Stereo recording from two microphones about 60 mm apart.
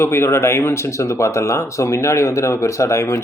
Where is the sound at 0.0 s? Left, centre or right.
Left.